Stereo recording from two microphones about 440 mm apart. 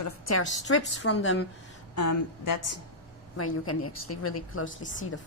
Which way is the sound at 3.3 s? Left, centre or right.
Left.